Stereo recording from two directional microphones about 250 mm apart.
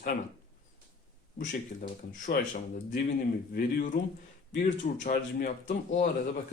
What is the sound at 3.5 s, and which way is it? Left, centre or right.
Speech, left.